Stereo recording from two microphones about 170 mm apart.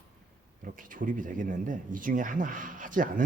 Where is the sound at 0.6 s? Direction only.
55° right (ahead or behind).